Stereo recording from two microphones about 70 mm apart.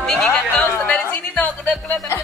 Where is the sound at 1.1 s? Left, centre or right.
Left.